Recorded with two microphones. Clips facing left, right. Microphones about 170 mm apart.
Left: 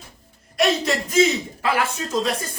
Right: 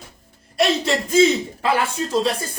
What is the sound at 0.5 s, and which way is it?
Speech, 30° right (ahead or behind).